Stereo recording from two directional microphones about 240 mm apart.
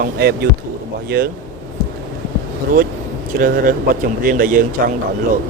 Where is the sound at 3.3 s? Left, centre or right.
Right.